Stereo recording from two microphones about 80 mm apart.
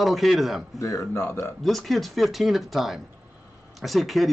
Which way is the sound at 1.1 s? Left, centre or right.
Left.